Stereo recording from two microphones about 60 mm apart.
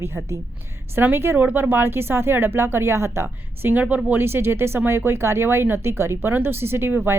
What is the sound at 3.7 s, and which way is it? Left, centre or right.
Speech, right.